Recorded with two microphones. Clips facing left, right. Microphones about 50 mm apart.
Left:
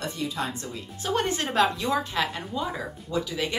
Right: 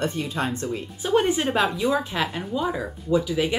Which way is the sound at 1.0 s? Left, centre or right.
Centre.